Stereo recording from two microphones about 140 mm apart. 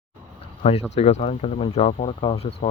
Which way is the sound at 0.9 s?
50° left (ahead or behind).